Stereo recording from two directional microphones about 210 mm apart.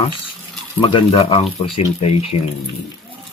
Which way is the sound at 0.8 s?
25° left (ahead or behind).